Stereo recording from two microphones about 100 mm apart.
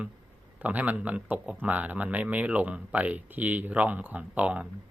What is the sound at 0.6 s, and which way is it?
Speech, 15° right (ahead or behind).